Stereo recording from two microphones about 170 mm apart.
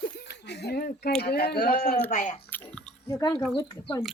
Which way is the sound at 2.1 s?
45° left (ahead or behind).